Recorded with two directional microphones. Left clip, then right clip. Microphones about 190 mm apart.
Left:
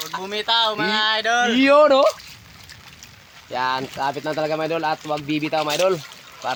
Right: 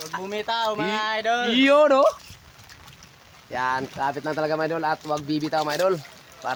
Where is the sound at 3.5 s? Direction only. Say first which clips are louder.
Left 2 dB; 30° left (ahead or behind).